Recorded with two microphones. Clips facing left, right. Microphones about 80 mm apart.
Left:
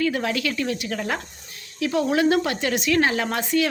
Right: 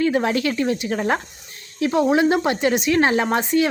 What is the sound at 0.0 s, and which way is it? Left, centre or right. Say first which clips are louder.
Speech: right 4 dB; right.